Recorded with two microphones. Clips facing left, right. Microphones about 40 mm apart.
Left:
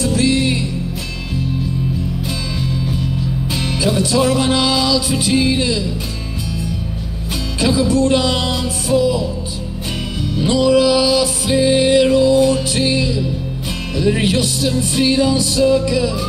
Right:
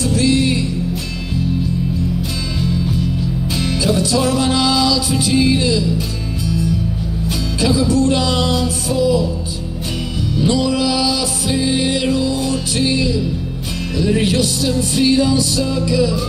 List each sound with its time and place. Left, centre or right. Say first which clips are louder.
0.0 s music: even; left
3.4 s music: right 1 dB; left
7.6 s music: even; left
10.4 s music: left 4 dB; left